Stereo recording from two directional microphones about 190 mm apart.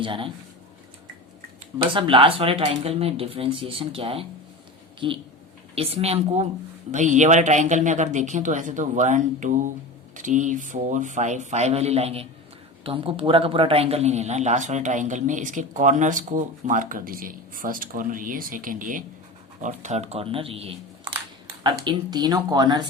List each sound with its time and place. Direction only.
0.0 s speech: 25° right (ahead or behind)
1.9 s a man's voice: 25° right (ahead or behind)